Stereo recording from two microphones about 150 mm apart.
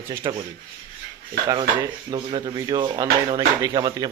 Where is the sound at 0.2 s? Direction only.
25° right (ahead or behind).